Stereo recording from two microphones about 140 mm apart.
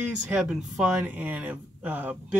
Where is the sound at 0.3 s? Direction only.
5° right (ahead or behind).